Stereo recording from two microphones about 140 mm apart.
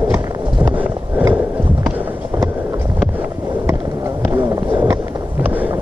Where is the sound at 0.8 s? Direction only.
15° right (ahead or behind).